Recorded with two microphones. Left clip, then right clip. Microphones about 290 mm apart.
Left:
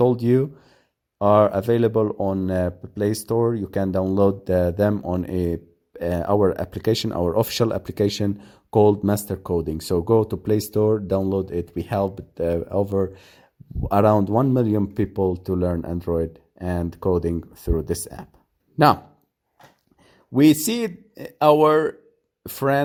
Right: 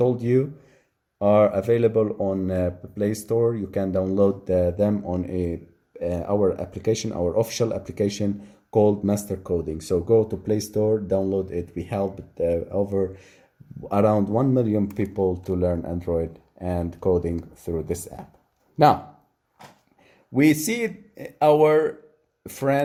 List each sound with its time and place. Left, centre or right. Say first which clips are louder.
0.0 s speech: left 2 dB; left
20.3 s speech: left 3 dB; left